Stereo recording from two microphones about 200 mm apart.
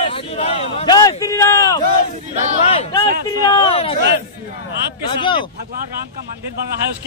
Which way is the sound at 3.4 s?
20° left (ahead or behind).